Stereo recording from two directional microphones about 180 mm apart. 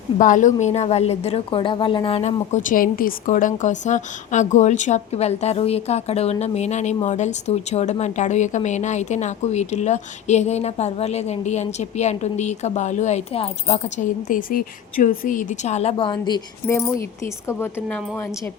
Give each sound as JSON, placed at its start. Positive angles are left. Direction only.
{"t": 0.2, "sound": "a woman's voice", "side_deg": 45}
{"t": 17.6, "sound": "a woman's voice", "side_deg": 10}